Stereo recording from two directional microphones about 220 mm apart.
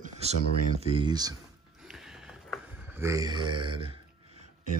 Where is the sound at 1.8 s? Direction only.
Centre (ahead or behind); by 4.4 s 25° right (ahead or behind).